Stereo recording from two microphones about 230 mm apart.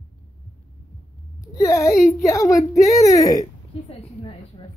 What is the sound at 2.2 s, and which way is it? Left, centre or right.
A woman's voice, centre.